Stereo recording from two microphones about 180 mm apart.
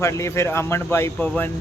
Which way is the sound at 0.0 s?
15° left (ahead or behind).